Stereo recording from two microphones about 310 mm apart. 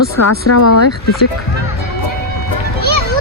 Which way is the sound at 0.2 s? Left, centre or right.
Left.